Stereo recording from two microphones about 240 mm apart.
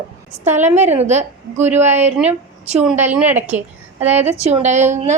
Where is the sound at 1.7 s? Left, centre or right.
Centre.